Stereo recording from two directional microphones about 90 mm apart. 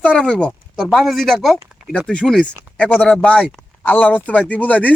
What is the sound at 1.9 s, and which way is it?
Speech, 10° left (ahead or behind).